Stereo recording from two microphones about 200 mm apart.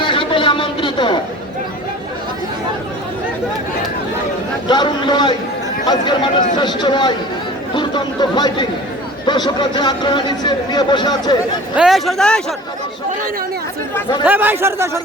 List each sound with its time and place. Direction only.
0.0 s a sound: 25° left (ahead or behind)
4.7 s speech: 20° left (ahead or behind)
11.8 s a man's voice: centre (ahead or behind)
14.3 s a man's voice: 10° right (ahead or behind)